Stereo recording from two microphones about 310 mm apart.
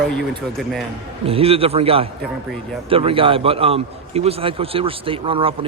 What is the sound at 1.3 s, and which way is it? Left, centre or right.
A man's voice, centre.